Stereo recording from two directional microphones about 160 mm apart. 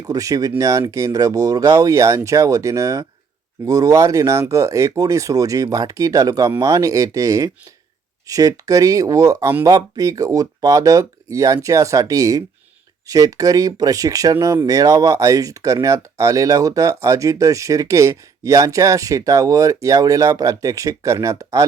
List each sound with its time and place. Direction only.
0.0 s speech: 20° right (ahead or behind)